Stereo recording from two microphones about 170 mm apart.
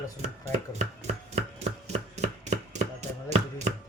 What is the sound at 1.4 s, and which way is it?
Chopping, 40° right (ahead or behind).